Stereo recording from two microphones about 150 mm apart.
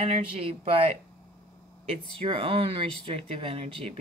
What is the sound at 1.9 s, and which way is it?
Speech, 35° right (ahead or behind).